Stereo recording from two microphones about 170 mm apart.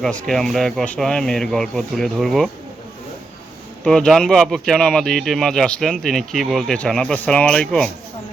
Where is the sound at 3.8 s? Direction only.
5° left (ahead or behind).